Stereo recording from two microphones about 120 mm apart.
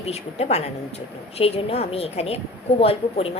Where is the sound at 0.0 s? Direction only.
60° left (ahead or behind).